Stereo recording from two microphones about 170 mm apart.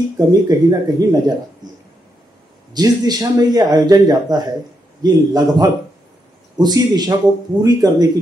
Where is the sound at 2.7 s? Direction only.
25° right (ahead or behind).